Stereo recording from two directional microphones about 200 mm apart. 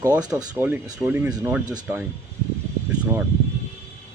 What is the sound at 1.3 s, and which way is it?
Speech, 20° right (ahead or behind).